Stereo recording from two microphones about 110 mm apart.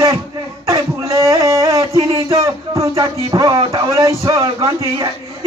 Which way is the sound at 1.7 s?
55° right (ahead or behind).